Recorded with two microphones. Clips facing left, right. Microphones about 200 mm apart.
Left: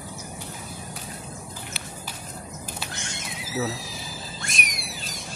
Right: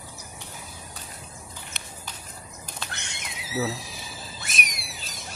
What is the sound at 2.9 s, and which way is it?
Horse, 65° right (ahead or behind).